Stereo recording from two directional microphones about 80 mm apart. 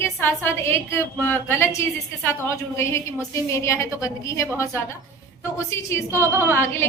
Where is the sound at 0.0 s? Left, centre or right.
Left.